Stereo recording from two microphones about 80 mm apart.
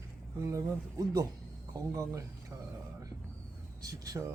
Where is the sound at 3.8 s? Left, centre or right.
Right.